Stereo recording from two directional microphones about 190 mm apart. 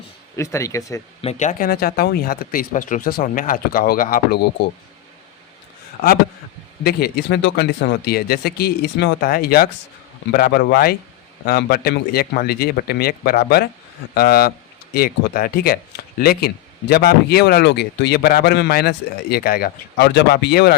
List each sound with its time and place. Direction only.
0.3 s speech: 15° left (ahead or behind)
1.2 s speech: 35° left (ahead or behind); by 4.7 s 60° left (ahead or behind)
6.0 s a man's voice: 50° left (ahead or behind)